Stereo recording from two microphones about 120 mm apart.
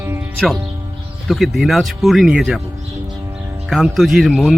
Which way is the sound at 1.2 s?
Centre (ahead or behind).